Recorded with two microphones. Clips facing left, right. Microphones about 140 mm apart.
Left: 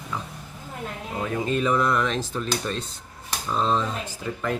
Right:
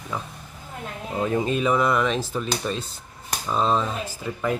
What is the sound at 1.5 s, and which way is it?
Speech, 10° right (ahead or behind).